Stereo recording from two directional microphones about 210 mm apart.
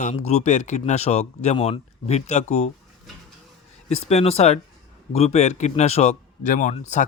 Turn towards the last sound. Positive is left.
turn(degrees=35)  # may be behind; listen again after turning